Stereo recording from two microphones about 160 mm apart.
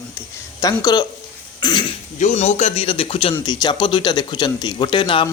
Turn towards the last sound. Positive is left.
turn(degrees=30)  # may be behind; listen again after turning